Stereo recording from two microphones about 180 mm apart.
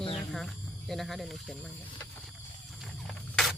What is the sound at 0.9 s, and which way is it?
Speech, centre (ahead or behind).